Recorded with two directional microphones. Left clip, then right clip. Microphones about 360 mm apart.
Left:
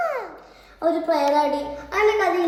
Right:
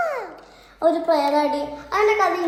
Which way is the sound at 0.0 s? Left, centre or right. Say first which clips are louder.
Right 1 dB; centre.